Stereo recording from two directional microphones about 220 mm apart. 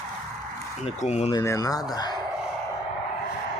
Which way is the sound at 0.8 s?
30° left (ahead or behind).